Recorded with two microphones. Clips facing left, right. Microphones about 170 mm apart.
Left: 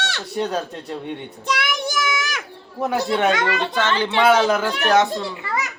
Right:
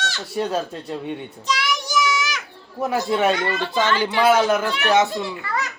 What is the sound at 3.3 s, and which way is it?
Speech, 90° left.